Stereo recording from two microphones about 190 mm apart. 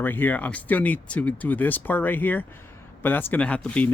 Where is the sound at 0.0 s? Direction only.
10° left (ahead or behind).